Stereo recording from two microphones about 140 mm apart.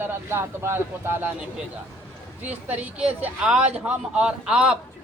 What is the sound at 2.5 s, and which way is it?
Speech, 10° right (ahead or behind).